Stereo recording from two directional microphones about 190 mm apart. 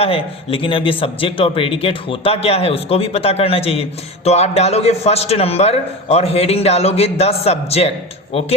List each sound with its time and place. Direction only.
0.0 s a man's voice: 30° left (ahead or behind)